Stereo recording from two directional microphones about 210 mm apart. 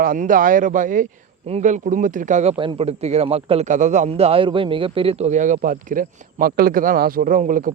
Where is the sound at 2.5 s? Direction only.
25° right (ahead or behind).